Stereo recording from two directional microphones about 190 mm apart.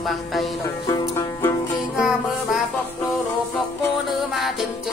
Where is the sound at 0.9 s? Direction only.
25° left (ahead or behind).